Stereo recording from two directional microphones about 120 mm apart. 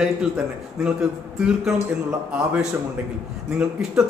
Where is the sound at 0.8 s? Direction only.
5° right (ahead or behind).